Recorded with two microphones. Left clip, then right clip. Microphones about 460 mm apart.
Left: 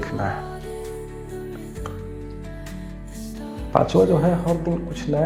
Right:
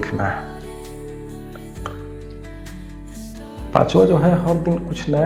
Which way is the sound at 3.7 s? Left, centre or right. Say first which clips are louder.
Right 3 dB; left.